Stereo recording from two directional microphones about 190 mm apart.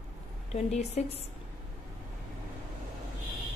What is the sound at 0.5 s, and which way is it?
Speech, 35° left (ahead or behind).